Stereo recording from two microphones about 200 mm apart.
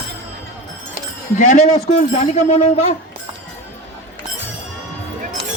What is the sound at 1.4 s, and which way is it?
Speech, 40° left (ahead or behind).